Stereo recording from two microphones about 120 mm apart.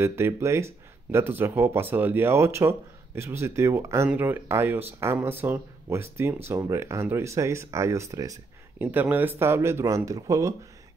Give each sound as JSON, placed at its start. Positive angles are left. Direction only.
{"t": 0.0, "sound": "speech", "side_deg": -20}
{"t": 8.8, "sound": "speech", "side_deg": -15}